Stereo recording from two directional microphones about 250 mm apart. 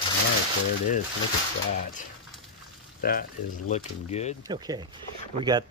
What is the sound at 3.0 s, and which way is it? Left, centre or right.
Speech, left.